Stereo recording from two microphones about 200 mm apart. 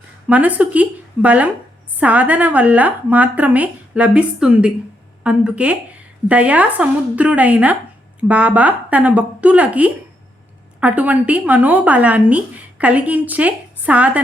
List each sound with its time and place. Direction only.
0.3 s a woman's voice: 5° right (ahead or behind)